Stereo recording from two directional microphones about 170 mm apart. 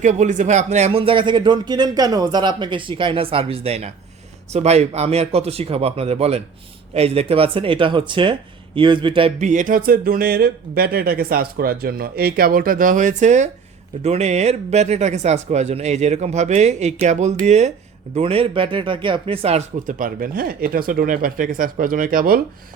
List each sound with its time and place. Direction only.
0.0 s speech: 45° right (ahead or behind); by 9.3 s 30° right (ahead or behind)
9.4 s speech: 50° right (ahead or behind)